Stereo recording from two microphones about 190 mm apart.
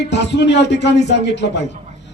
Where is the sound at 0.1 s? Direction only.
65° left (ahead or behind).